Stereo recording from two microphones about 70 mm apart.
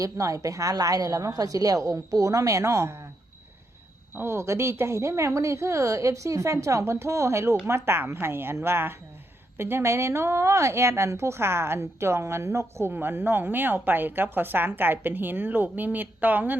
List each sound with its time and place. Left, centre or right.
0.0 s speech: right
4.1 s a woman's voice: right